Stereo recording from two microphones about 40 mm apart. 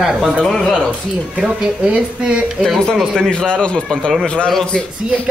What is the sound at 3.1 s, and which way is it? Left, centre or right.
Speech, left.